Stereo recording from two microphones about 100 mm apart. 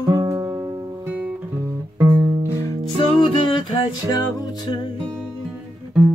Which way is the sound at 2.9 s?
55° left (ahead or behind).